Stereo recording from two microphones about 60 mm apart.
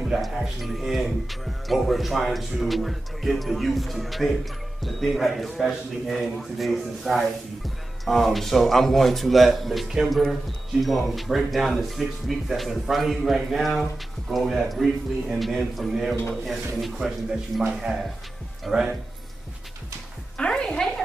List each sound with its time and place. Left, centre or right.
0.0 s a man's voice: centre
20.3 s music: centre
20.6 s a sound: centre